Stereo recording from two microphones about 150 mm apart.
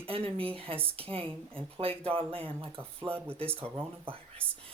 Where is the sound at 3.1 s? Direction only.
15° right (ahead or behind).